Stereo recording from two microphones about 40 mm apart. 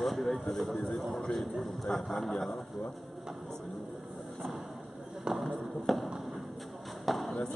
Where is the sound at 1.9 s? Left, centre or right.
Left.